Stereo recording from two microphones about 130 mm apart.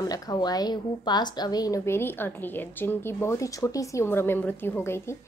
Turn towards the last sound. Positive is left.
turn(degrees=20)  # may be behind; listen again after turning